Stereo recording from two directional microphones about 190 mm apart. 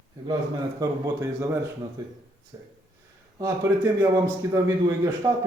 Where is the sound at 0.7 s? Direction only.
15° right (ahead or behind).